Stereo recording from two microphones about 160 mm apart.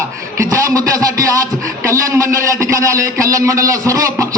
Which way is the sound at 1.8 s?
20° right (ahead or behind).